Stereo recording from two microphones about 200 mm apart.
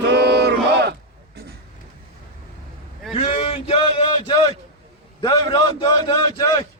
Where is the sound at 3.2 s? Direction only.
30° left (ahead or behind).